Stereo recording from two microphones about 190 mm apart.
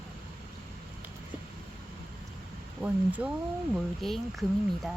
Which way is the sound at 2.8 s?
10° right (ahead or behind).